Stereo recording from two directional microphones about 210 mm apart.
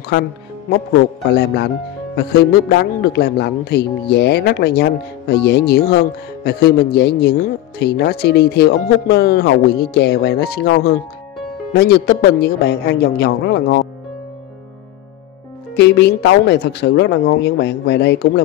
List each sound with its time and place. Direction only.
1.3 s speech: 50° left (ahead or behind)
15.7 s speech: 55° left (ahead or behind)